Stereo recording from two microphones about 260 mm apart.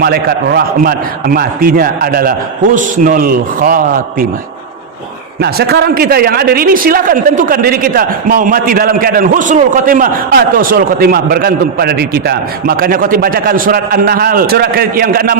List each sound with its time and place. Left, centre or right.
0.0 s a man's voice: right
5.4 s a man's voice: right